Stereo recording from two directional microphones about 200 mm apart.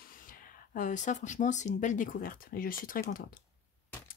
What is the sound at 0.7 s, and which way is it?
Speech, 40° left (ahead or behind).